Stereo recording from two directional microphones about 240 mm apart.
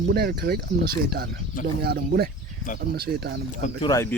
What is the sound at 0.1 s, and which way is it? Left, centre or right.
Speech, right.